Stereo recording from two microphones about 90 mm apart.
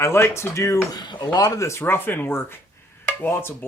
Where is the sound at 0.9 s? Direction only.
50° left (ahead or behind).